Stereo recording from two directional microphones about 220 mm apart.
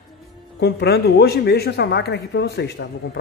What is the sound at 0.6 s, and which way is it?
A man's voice, 50° left (ahead or behind).